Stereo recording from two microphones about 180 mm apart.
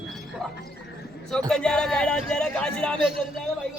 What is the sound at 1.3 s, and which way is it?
A man's voice, 5° left (ahead or behind).